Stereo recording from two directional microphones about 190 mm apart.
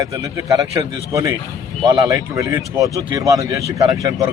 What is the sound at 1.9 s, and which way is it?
A man's voice, 20° right (ahead or behind).